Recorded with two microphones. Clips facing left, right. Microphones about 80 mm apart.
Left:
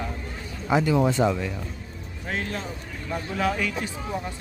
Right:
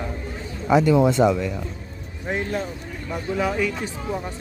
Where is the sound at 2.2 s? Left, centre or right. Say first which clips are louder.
Right 5 dB; centre.